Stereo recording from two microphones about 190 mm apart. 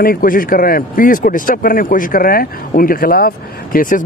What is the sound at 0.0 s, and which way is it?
Speech, 50° left (ahead or behind).